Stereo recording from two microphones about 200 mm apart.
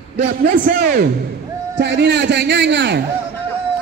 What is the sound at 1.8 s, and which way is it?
A man's voice, 60° right (ahead or behind).